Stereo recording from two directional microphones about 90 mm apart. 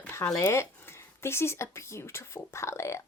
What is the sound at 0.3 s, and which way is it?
A woman's voice, 30° left (ahead or behind).